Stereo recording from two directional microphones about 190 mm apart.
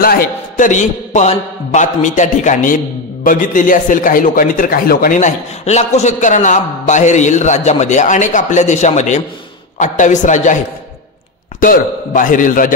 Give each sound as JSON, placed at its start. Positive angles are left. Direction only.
{"t": 0.0, "sound": "a man's voice", "side_deg": 45}
{"t": 11.6, "sound": "a man's voice", "side_deg": 45}